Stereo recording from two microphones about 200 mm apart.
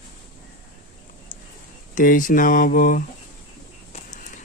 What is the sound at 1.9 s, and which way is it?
Speech, 40° left (ahead or behind).